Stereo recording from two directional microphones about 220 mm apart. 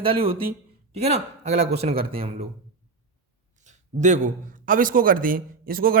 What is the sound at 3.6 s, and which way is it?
A man's voice, 35° right (ahead or behind).